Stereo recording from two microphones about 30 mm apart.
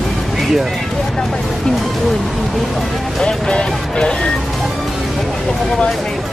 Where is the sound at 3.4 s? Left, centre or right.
Left.